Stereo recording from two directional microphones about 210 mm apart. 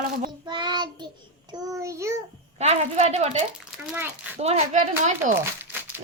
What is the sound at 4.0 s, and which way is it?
Child singing, 10° right (ahead or behind).